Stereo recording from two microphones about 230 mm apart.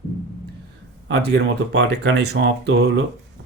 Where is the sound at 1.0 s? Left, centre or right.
Right.